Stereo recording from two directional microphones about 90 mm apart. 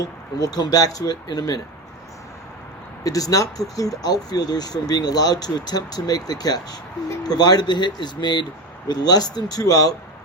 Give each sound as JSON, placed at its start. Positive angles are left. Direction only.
{"t": 0.0, "sound": "speech", "side_deg": 45}
{"t": 3.0, "sound": "speech", "side_deg": 40}